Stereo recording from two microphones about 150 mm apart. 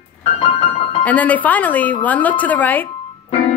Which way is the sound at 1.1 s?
10° left (ahead or behind).